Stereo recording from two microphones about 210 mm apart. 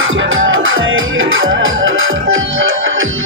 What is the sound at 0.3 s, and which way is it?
Music, 70° right (ahead or behind).